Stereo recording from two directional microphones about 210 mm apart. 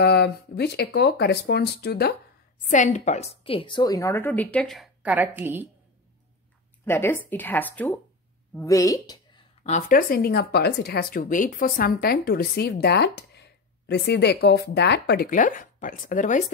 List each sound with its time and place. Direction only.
0.0 s speech: 50° left (ahead or behind)
2.7 s a woman's voice: 35° left (ahead or behind); by 5.7 s 10° right (ahead or behind)
6.8 s a woman's voice: 10° left (ahead or behind)
8.5 s a sound: 15° left (ahead or behind)
9.7 s speech: 40° left (ahead or behind)